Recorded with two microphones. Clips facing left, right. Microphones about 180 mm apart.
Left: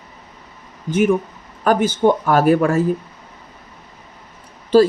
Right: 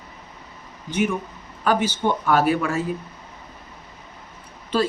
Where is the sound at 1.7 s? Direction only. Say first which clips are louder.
Left 6 dB; 50° left (ahead or behind).